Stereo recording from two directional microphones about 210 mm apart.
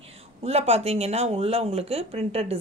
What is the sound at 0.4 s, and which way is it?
Speech, 30° right (ahead or behind).